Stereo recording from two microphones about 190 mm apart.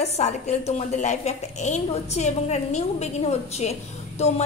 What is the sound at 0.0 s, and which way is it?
A woman's voice, 35° left (ahead or behind).